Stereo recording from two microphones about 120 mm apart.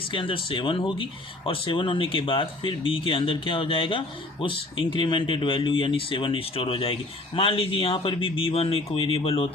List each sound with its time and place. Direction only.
0.1 s speech: 45° left (ahead or behind)